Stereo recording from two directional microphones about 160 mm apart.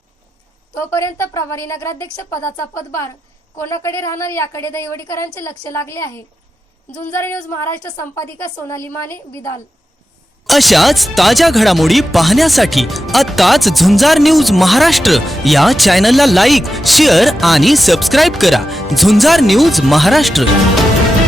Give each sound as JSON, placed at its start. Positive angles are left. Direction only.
{"t": 0.8, "sound": "a woman's voice", "side_deg": 15}
{"t": 10.4, "sound": "speech", "side_deg": 0}